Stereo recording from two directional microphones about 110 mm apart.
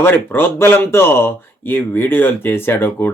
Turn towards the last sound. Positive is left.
turn(degrees=20)  # may be behind; listen again after turning